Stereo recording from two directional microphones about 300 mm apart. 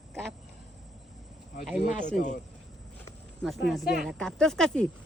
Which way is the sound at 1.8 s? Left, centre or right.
Left.